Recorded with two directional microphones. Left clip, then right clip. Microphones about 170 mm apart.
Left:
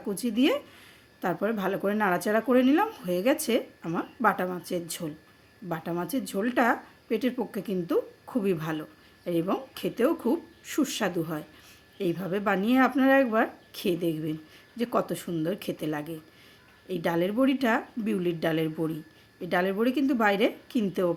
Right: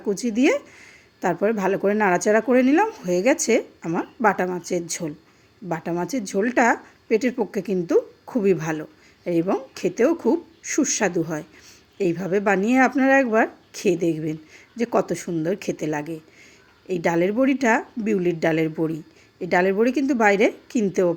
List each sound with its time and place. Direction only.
0.1 s a woman's voice: 20° right (ahead or behind)